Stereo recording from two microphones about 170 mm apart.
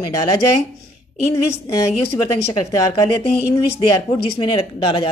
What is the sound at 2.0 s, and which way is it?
Speech, 35° left (ahead or behind).